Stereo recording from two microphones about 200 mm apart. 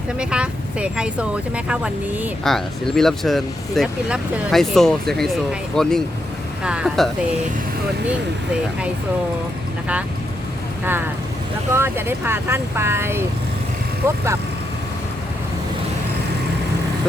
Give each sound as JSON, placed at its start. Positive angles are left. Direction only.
{"t": 0.2, "sound": "speech", "side_deg": -5}
{"t": 11.7, "sound": "speech", "side_deg": -10}